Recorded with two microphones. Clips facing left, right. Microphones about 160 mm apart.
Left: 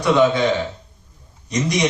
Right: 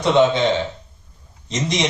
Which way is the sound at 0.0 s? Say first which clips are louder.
Even; 25° right (ahead or behind).